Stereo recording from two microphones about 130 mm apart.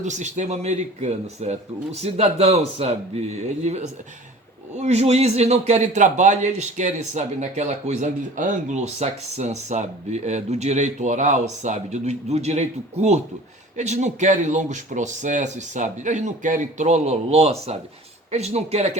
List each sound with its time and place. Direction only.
0.0 s a man's voice: 65° right (ahead or behind)